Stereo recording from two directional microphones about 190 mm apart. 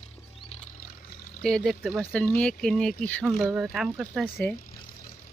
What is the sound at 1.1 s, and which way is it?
Pour, 50° left (ahead or behind).